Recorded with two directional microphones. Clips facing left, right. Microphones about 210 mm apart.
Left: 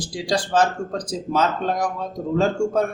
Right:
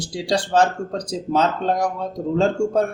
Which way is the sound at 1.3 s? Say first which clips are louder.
Right 2 dB; 30° right (ahead or behind).